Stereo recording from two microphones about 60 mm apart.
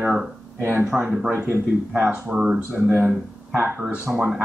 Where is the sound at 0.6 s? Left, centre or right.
Right.